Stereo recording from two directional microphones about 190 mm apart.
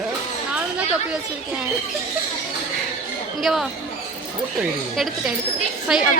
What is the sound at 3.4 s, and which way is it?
Speech, centre (ahead or behind).